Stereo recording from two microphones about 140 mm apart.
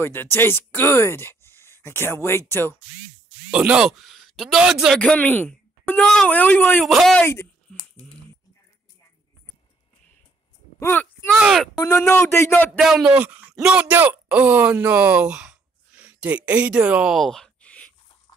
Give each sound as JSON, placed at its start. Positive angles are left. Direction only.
{"t": 0.0, "sound": "speech", "side_deg": 15}
{"t": 3.5, "sound": "speech", "side_deg": -5}
{"t": 5.0, "sound": "speech", "side_deg": 10}
{"t": 6.8, "sound": "speech", "side_deg": 0}
{"t": 7.2, "sound": "speech", "side_deg": 20}
{"t": 10.8, "sound": "speech", "side_deg": 15}
{"t": 11.3, "sound": "speech", "side_deg": -5}
{"t": 11.9, "sound": "speech", "side_deg": 15}
{"t": 12.7, "sound": "speech", "side_deg": 0}